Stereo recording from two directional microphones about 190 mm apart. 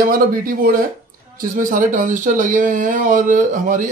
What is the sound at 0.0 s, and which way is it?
Speech, 50° right (ahead or behind).